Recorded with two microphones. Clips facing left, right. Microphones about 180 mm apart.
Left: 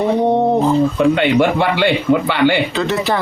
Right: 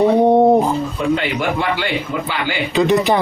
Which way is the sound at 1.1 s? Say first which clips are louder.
Left 5 dB; 70° left (ahead or behind).